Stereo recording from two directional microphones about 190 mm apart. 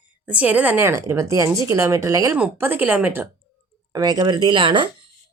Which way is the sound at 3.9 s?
20° right (ahead or behind).